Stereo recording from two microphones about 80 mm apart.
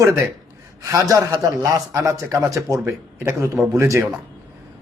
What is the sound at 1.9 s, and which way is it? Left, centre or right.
A man's voice, right.